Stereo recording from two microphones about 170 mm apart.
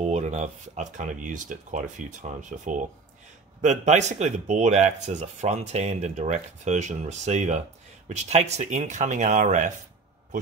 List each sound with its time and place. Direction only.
0.0 s speech: 40° right (ahead or behind)